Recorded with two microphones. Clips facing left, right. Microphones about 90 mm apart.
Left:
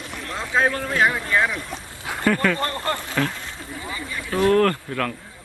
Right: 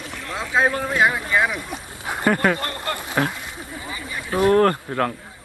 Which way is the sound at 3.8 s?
15° right (ahead or behind).